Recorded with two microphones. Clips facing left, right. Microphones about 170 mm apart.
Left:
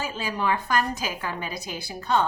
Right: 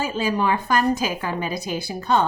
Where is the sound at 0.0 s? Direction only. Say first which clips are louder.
Right 6 dB; 20° right (ahead or behind).